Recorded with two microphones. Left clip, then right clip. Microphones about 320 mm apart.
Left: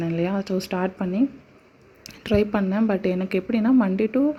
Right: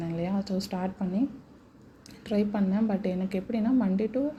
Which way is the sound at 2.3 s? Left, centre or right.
Left.